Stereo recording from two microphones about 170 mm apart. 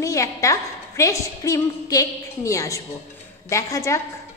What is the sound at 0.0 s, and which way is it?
A woman's voice, 20° left (ahead or behind).